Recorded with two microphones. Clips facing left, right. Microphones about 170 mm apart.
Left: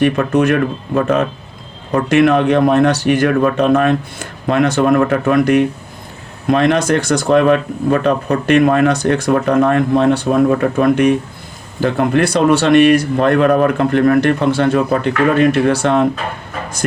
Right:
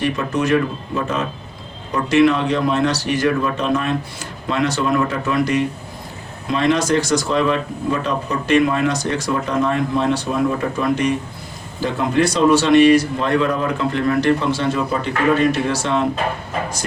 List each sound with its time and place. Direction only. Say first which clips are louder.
0.0 s speech: left 7 dB; 60° left (ahead or behind)